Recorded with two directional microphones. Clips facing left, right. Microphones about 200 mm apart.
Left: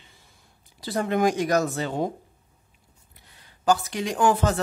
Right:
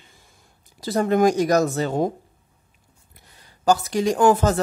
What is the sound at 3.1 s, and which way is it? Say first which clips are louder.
Speech: right 3 dB; 40° right (ahead or behind).